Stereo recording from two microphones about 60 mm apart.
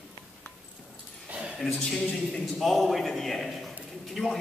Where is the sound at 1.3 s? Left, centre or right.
Right.